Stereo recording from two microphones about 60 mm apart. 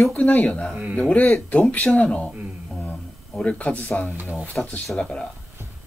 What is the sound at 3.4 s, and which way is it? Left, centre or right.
Speech, left.